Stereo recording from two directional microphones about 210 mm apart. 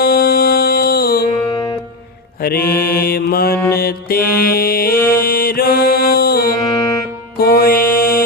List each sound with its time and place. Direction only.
0.0 s music: 45° left (ahead or behind)
1.5 s music: 20° left (ahead or behind)
2.4 s mantra: 45° left (ahead or behind)
7.3 s music: 45° left (ahead or behind)